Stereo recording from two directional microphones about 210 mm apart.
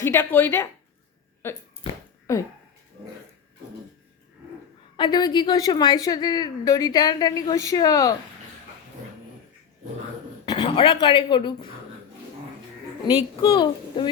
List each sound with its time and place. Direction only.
0.0 s speech: 10° left (ahead or behind)
4.9 s a woman's voice: 20° left (ahead or behind)
10.4 s a sound: 20° left (ahead or behind)
11.0 s a woman's voice: 25° left (ahead or behind)
13.4 s a woman's voice: 20° left (ahead or behind)